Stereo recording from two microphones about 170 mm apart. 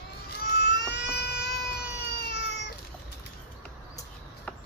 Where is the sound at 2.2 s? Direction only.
75° left (ahead or behind).